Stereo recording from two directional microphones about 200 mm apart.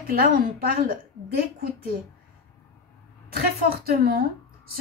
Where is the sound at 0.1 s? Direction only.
50° right (ahead or behind).